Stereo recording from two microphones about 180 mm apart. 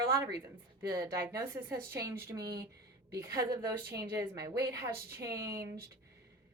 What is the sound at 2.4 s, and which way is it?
Speech, 60° right (ahead or behind).